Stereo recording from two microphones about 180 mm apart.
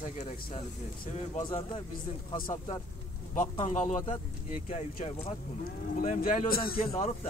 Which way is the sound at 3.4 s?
40° left (ahead or behind).